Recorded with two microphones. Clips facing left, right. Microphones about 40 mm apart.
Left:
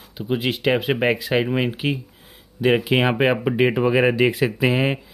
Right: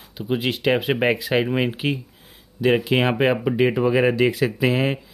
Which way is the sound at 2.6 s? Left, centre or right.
Centre.